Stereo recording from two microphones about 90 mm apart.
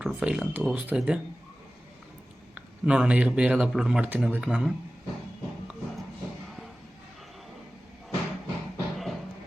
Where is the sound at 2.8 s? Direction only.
10° right (ahead or behind).